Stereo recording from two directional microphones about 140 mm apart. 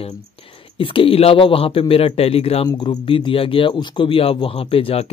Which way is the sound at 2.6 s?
30° left (ahead or behind).